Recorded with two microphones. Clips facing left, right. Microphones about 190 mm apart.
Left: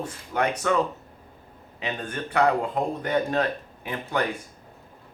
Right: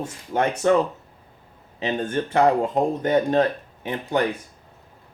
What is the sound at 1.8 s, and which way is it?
Speech, 30° right (ahead or behind).